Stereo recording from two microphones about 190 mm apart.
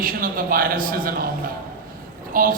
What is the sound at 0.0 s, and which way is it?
A man's voice, 50° right (ahead or behind).